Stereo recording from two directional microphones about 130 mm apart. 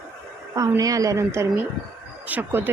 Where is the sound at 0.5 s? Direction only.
25° right (ahead or behind).